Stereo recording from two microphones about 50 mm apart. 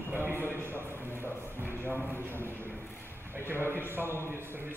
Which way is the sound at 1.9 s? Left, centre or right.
Left.